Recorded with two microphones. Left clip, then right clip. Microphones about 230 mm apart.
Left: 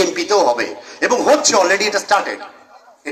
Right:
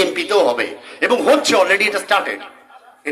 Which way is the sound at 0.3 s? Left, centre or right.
Right.